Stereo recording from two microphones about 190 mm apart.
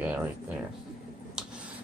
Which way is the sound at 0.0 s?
10° right (ahead or behind).